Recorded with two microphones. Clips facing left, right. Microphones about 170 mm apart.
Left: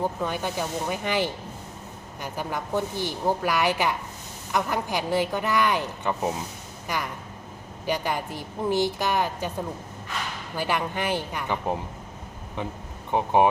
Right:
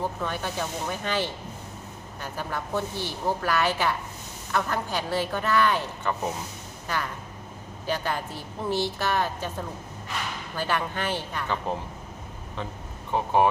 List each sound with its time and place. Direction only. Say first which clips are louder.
0.0 s a woman's voice: left 3 dB; 15° left (ahead or behind)
13.1 s speech: left 2 dB; 15° left (ahead or behind)